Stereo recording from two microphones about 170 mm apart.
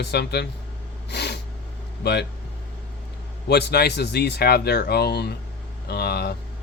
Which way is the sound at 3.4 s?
75° left (ahead or behind).